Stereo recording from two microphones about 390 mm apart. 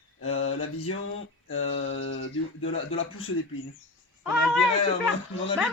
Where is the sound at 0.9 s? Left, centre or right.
Left.